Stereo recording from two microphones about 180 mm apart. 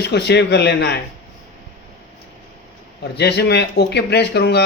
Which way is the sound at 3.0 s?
65° left (ahead or behind).